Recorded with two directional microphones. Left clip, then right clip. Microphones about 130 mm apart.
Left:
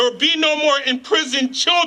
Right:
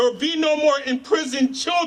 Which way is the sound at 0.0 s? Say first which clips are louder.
Left 4 dB; 15° left (ahead or behind).